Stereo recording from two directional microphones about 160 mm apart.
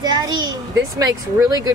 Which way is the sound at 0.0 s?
25° right (ahead or behind).